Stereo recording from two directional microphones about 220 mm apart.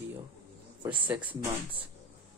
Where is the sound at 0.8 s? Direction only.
20° right (ahead or behind).